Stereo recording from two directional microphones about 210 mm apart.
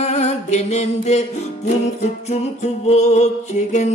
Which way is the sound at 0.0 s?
30° left (ahead or behind).